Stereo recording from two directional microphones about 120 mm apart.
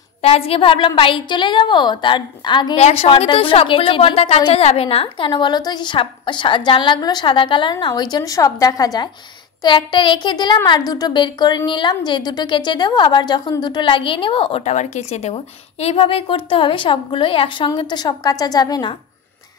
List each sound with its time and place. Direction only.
0.2 s a woman's voice: 55° left (ahead or behind)
2.8 s a woman's voice: 55° left (ahead or behind); by 18.9 s 40° left (ahead or behind)